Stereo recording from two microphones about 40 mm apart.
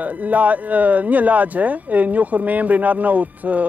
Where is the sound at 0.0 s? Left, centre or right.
Right.